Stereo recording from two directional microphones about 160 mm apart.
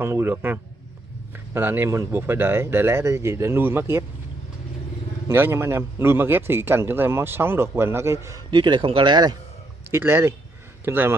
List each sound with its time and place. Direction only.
0.0 s a man's voice: 15° right (ahead or behind)
5.3 s a man's voice: 15° right (ahead or behind)
8.5 s speech: 30° right (ahead or behind)
9.8 s a man's voice: 15° right (ahead or behind)